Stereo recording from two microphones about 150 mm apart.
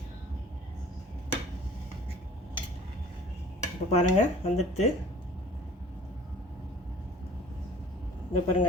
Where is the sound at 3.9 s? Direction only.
40° left (ahead or behind).